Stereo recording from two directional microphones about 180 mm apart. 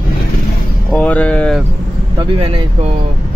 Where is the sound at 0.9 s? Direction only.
10° left (ahead or behind).